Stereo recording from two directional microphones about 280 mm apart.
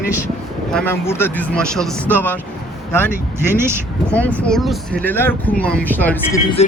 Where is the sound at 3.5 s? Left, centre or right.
Centre.